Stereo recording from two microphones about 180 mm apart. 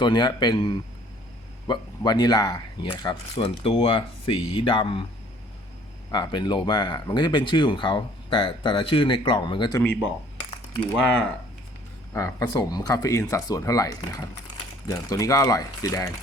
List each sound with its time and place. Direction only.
0.0 s speech: 25° left (ahead or behind)
6.1 s speech: 25° left (ahead or behind)
9.8 s speech: 10° left (ahead or behind)
12.1 s speech: 20° left (ahead or behind)